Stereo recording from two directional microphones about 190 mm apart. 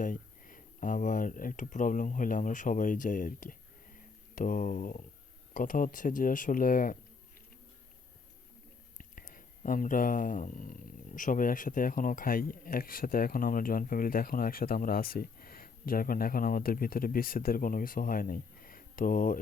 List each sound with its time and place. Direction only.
0.0 s speech: 45° left (ahead or behind)
9.0 s speech: 45° left (ahead or behind)